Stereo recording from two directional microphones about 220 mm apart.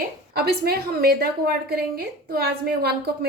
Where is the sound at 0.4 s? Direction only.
45° right (ahead or behind).